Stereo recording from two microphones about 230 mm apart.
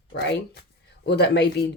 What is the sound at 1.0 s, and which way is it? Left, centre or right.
Speech, left.